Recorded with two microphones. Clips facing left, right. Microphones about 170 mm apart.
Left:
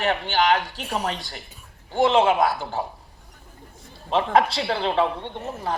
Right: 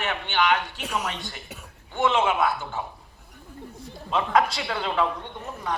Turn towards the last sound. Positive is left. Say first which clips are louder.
# left 3 dB
turn(degrees=30)  # may be behind; listen again after turning